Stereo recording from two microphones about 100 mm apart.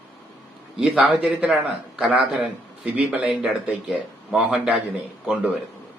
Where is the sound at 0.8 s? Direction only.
10° right (ahead or behind).